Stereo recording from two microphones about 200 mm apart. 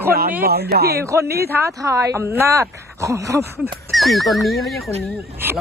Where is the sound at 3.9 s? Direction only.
Centre (ahead or behind).